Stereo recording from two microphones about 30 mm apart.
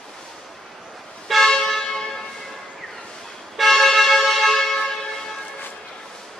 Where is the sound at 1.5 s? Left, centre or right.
Centre.